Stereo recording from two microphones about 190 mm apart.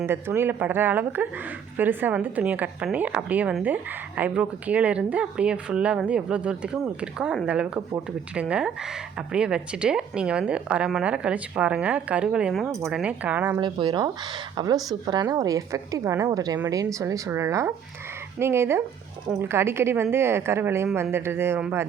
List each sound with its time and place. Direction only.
0.0 s a woman's voice: 10° right (ahead or behind)
13.6 s a woman's voice: 25° right (ahead or behind)